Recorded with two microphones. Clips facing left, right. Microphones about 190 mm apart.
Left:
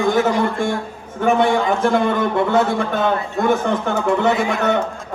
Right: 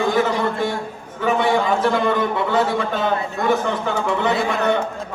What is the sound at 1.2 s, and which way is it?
A man's voice, 50° left (ahead or behind).